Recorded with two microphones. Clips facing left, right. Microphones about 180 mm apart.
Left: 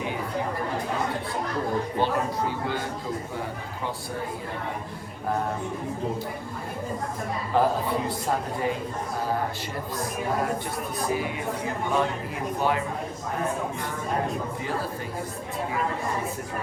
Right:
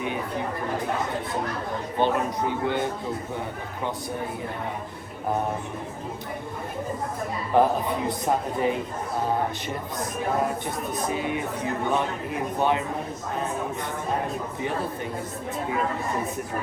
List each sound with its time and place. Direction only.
2.0 s a man's voice: 20° right (ahead or behind)
7.5 s a woman's voice: 20° right (ahead or behind)
11.0 s a woman's voice: 20° right (ahead or behind)